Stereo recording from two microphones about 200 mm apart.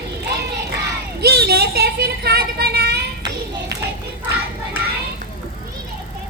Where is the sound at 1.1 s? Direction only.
50° right (ahead or behind).